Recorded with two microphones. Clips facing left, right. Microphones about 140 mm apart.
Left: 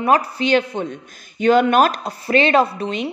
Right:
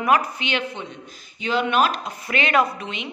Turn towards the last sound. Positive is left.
turn(degrees=35)  # may be behind; listen again after turning